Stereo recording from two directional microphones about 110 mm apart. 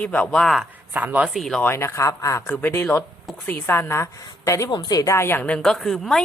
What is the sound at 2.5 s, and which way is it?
A woman's voice, 15° left (ahead or behind).